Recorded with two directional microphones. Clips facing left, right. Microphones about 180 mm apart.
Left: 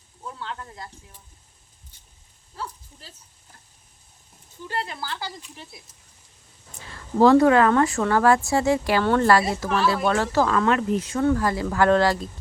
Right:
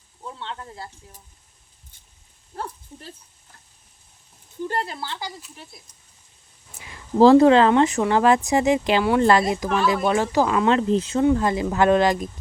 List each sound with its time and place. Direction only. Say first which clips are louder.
0.2 s sizzle: even; 20° right (ahead or behind)
2.6 s speech: right 3 dB; 55° right (ahead or behind)
4.7 s speech: right 2 dB; 40° right (ahead or behind)
4.9 s speech: right 1 dB; 20° right (ahead or behind)
5.4 s speech: left 1 dB; centre (ahead or behind)
6.7 s speech: left 1 dB; 15° right (ahead or behind)
7.2 s speech: right 3 dB; 25° right (ahead or behind)
10.7 s speech: right 3 dB; 25° right (ahead or behind)